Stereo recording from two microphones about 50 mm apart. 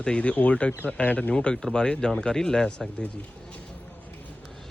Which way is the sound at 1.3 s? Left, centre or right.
Centre.